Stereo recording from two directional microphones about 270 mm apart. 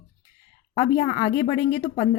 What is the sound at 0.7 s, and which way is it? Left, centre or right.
Speech, left.